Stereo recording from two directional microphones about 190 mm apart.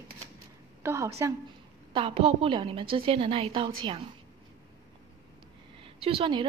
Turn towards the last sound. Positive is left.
turn(degrees=-25)  # may be behind; listen again after turning